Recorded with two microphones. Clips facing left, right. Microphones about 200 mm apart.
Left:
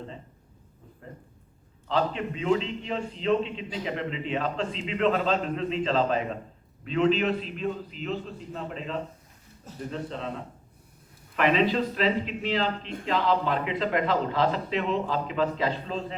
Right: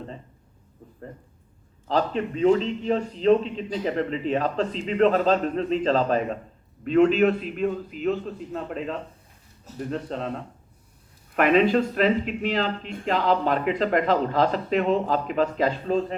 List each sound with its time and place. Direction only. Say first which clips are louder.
1.9 s speech: right 3 dB; 45° right (ahead or behind)
9.9 s speech: right 5 dB; 50° right (ahead or behind)
11.3 s speech: right 4 dB; 50° right (ahead or behind)